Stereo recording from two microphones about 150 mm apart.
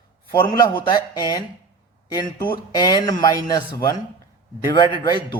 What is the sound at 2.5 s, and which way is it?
Speech, 30° left (ahead or behind).